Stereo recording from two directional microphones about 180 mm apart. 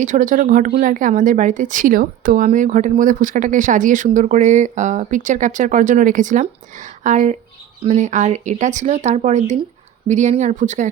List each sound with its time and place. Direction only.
0.0 s speech: 45° right (ahead or behind)